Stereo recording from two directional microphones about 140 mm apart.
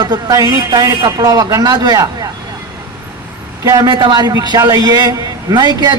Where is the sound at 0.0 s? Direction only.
30° right (ahead or behind).